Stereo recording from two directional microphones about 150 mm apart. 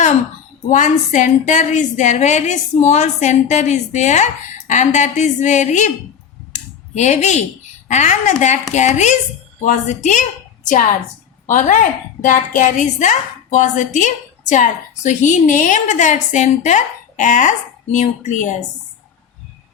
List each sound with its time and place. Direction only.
0.7 s a woman's voice: 55° left (ahead or behind)
6.5 s computer keyboard: 50° left (ahead or behind)
7.9 s a woman's voice: 55° left (ahead or behind)
11.4 s a woman's voice: 60° left (ahead or behind)